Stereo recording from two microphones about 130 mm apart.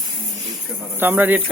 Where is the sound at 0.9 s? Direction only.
15° right (ahead or behind).